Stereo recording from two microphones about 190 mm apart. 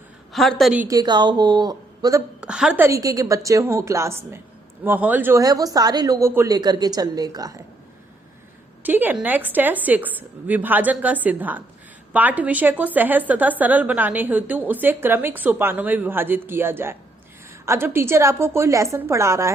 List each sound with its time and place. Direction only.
0.3 s a woman's voice: centre (ahead or behind)
0.9 s speech: 20° right (ahead or behind)
2.4 s a woman's voice: 5° right (ahead or behind); by 7.6 s 20° right (ahead or behind)
8.8 s a woman's voice: 10° right (ahead or behind)